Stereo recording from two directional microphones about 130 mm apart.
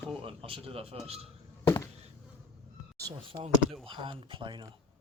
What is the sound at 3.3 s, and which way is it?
Speech, 45° right (ahead or behind).